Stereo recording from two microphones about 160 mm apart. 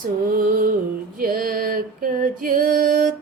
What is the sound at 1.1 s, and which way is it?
Female singing, 65° right (ahead or behind).